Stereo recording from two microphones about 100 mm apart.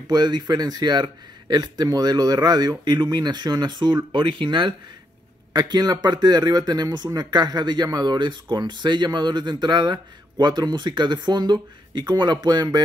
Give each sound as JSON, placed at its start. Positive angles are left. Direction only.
{"t": 0.1, "sound": "speech", "side_deg": -45}